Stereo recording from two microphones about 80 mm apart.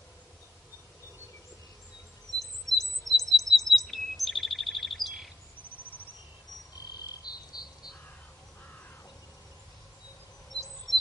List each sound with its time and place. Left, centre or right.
2.3 s chirp: centre
7.3 s cricket: left